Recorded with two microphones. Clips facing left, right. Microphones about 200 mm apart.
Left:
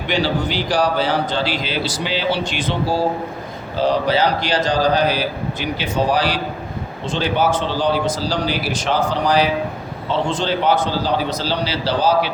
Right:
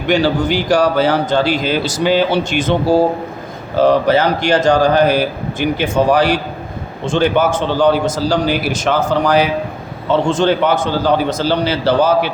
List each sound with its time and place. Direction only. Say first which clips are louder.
0.1 s a man's voice: right 6 dB; 45° right (ahead or behind)